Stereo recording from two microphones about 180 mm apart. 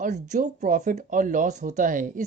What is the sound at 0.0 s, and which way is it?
Speech, 40° right (ahead or behind).